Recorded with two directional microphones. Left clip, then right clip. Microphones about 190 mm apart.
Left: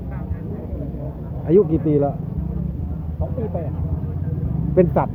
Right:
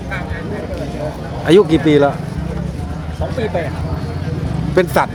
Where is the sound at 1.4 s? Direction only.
25° right (ahead or behind).